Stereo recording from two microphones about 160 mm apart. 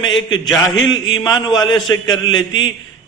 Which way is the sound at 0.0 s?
30° left (ahead or behind).